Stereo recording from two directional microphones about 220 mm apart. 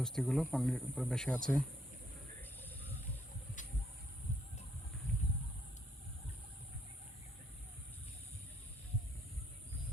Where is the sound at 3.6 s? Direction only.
35° left (ahead or behind).